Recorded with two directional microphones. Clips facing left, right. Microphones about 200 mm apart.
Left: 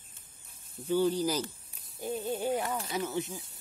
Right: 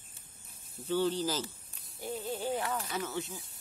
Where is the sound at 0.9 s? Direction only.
10° left (ahead or behind).